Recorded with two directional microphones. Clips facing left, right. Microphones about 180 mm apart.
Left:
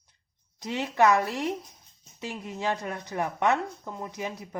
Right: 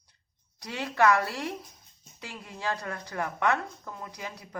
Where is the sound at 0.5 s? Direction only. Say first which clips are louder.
Left 3 dB; 20° left (ahead or behind).